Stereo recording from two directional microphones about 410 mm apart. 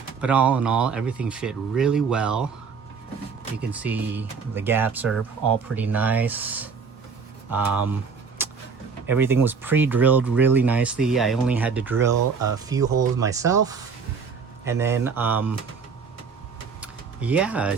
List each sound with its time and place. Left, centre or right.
0.2 s speech: centre
3.7 s speech: centre
8.4 s vehicle: centre
9.0 s speech: centre
12.1 s speech: right
12.6 s speech: centre
16.8 s a sound: centre